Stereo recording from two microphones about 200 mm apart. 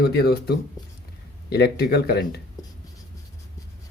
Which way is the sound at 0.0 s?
50° left (ahead or behind).